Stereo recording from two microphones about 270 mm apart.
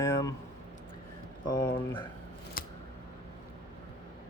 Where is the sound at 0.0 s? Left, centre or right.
Centre.